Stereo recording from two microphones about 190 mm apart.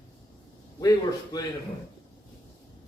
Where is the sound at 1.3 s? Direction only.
20° left (ahead or behind).